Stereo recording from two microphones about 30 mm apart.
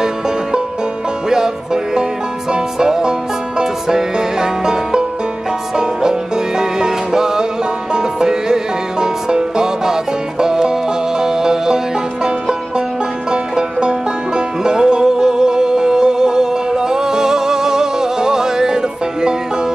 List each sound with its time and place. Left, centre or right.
1.3 s music: right
13.3 s music: right